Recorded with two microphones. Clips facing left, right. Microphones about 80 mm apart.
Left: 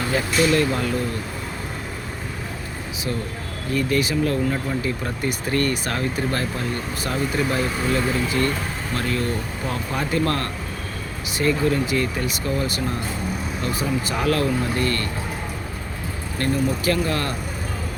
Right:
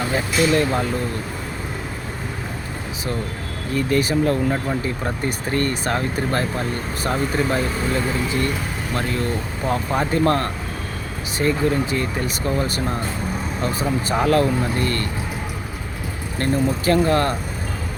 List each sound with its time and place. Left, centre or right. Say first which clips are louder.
0.1 s speech: even; right
3.8 s speech: right 2 dB; right
16.4 s speech: right 2 dB; right